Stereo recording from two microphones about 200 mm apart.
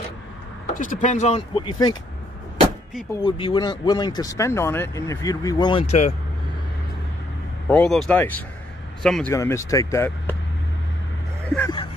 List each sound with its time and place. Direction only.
0.7 s speech: 40° left (ahead or behind); by 2.0 s 25° left (ahead or behind)
3.1 s speech: 20° left (ahead or behind)
7.6 s speech: 5° left (ahead or behind)
9.3 s speech: 15° left (ahead or behind)
11.4 s speech: 10° left (ahead or behind)